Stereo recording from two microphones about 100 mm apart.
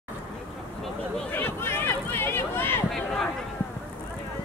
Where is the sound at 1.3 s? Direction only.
20° left (ahead or behind).